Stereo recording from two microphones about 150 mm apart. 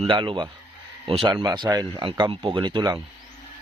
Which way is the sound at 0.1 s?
35° right (ahead or behind).